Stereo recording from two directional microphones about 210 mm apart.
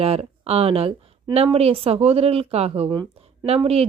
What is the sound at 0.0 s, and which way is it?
A woman's voice, 30° right (ahead or behind).